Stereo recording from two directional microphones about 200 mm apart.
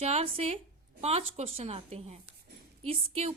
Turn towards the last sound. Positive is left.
turn(degrees=-30)  # may be behind; listen again after turning